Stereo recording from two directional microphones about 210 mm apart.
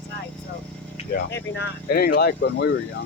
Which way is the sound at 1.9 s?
45° left (ahead or behind).